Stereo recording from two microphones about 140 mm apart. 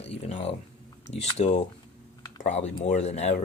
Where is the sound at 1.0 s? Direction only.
50° left (ahead or behind).